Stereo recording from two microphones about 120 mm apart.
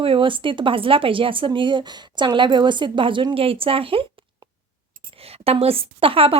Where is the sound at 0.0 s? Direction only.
45° right (ahead or behind).